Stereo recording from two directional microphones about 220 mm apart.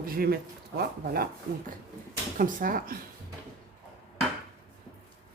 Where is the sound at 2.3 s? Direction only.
40° right (ahead or behind).